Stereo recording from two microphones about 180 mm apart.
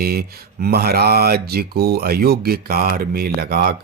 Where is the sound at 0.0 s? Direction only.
60° right (ahead or behind).